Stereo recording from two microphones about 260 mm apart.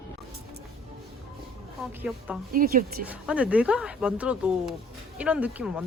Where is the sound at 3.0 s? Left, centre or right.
Centre.